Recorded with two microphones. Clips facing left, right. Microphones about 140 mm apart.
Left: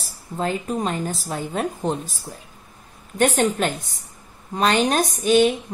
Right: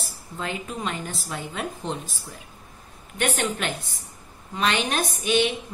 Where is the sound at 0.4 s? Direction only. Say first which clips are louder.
Left 7 dB; 40° left (ahead or behind).